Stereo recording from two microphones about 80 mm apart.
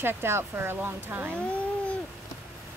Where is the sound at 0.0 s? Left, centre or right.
Right.